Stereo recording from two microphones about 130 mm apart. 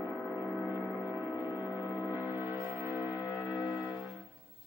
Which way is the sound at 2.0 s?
15° right (ahead or behind).